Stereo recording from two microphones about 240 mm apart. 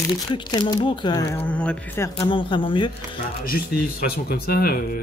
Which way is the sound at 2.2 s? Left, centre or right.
Centre.